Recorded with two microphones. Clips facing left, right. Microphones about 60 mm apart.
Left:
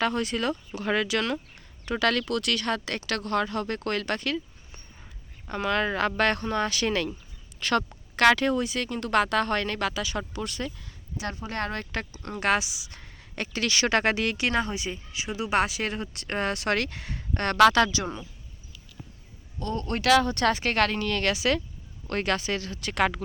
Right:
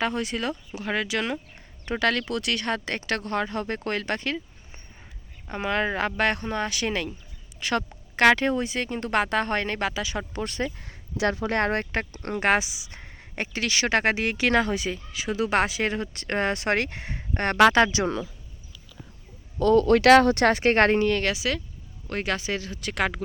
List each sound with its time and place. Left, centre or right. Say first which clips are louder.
0.0 s speech: left 1 dB; centre
10.3 s speech: right 4 dB; right
10.8 s a sound: right 3 dB; right
11.2 s speech: right 8 dB; right
12.4 s speech: right 2 dB; right
13.3 s speech: right 1 dB; centre
14.4 s speech: right 8 dB; right
15.6 s speech: right 3 dB; right
18.0 s speech: right 7 dB; right
19.7 s speech: right 12 dB; right
20.1 s speech: right 3 dB; right
20.7 s speech: right 6 dB; right
21.1 s speech: even; centre